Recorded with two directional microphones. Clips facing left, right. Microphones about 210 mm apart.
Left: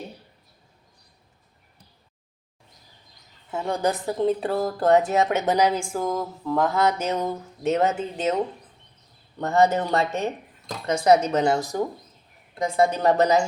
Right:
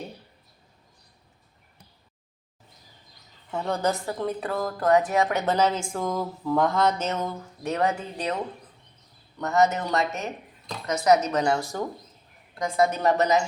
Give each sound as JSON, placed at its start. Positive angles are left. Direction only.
{"t": 3.5, "sound": "speech", "side_deg": 10}
{"t": 5.9, "sound": "a sound", "side_deg": 5}
{"t": 9.4, "sound": "speech", "side_deg": 30}